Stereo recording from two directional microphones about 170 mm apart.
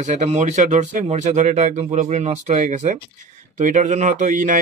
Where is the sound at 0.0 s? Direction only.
40° right (ahead or behind).